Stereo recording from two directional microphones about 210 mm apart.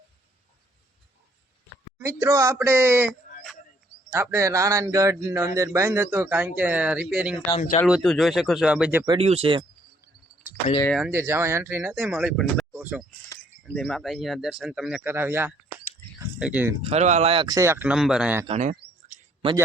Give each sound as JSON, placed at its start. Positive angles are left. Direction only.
{"t": 2.0, "sound": "speech", "side_deg": -15}
{"t": 4.1, "sound": "speech", "side_deg": -10}
{"t": 9.1, "sound": "speech", "side_deg": -30}
{"t": 10.9, "sound": "speech", "side_deg": -5}
{"t": 12.7, "sound": "a sound", "side_deg": -5}
{"t": 13.7, "sound": "speech", "side_deg": 0}
{"t": 16.1, "sound": "a sound", "side_deg": -10}
{"t": 16.9, "sound": "speech", "side_deg": -35}
{"t": 18.4, "sound": "speech", "side_deg": -35}
{"t": 19.0, "sound": "a sound", "side_deg": -35}